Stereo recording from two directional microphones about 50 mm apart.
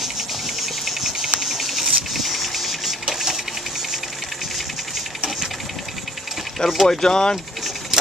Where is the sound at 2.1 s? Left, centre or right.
Centre.